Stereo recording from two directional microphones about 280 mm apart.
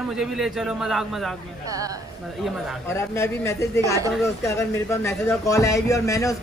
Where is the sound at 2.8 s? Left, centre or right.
Centre.